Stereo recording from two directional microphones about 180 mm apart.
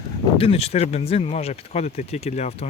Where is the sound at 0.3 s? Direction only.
35° left (ahead or behind).